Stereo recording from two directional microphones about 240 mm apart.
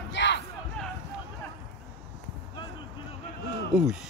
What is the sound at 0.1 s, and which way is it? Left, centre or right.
Crowd, left.